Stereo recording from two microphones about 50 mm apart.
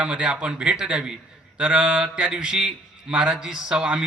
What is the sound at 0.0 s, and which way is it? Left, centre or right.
A man's voice, centre.